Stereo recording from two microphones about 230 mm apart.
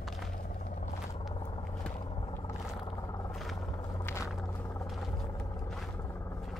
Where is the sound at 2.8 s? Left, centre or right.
Centre.